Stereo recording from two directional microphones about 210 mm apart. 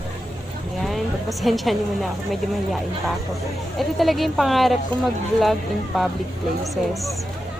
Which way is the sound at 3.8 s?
Centre (ahead or behind).